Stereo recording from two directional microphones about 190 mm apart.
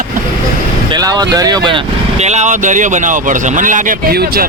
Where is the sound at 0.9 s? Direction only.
20° right (ahead or behind).